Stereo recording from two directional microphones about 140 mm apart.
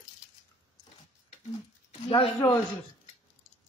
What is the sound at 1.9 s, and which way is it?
Speech, 40° left (ahead or behind).